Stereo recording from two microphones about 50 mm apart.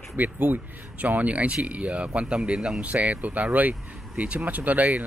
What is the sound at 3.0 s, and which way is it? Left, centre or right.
Speech, right.